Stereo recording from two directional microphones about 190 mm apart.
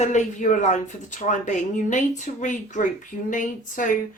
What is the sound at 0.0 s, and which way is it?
Speech, 40° left (ahead or behind).